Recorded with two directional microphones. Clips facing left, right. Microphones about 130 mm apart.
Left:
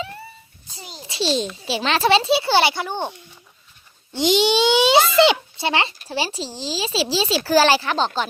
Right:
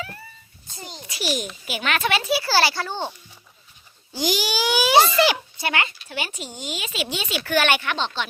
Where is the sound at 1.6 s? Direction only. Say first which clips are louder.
Left 5 dB; 30° left (ahead or behind).